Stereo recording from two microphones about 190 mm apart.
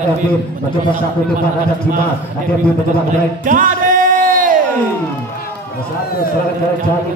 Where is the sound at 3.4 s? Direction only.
45° right (ahead or behind).